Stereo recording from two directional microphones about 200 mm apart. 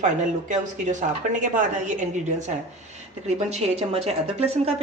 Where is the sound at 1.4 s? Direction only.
40° right (ahead or behind).